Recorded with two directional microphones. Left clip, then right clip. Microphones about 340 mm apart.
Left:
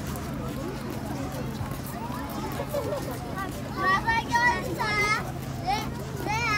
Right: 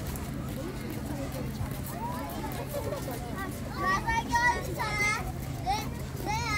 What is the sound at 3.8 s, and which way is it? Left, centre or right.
Vehicle, left.